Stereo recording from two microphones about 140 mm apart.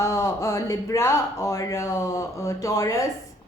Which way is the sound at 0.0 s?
20° left (ahead or behind).